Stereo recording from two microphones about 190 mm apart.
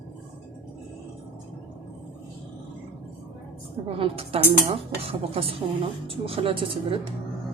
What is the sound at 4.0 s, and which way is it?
A woman's voice, 30° right (ahead or behind).